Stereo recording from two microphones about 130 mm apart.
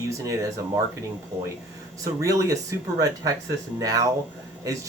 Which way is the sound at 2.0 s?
25° right (ahead or behind).